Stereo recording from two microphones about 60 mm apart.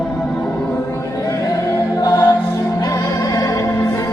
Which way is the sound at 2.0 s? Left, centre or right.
Left.